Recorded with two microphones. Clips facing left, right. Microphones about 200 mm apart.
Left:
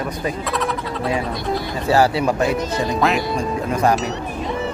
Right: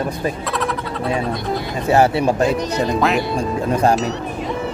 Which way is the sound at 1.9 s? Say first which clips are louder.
Right 2 dB; 25° right (ahead or behind).